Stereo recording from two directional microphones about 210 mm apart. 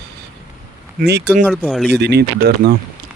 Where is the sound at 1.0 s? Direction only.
50° right (ahead or behind).